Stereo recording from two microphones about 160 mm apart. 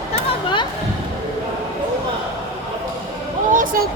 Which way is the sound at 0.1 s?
30° left (ahead or behind).